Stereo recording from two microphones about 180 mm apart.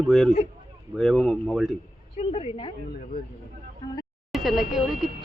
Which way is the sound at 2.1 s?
35° left (ahead or behind).